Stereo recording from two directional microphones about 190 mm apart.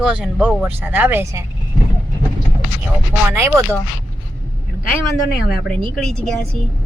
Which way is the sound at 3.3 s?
10° right (ahead or behind).